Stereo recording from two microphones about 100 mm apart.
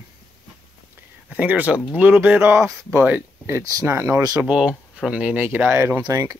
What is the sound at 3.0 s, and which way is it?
Speech, 15° right (ahead or behind).